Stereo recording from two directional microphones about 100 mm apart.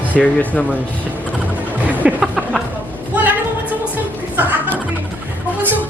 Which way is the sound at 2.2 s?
Centre (ahead or behind).